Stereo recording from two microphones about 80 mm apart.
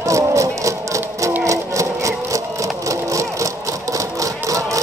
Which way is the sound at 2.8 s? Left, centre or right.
Right.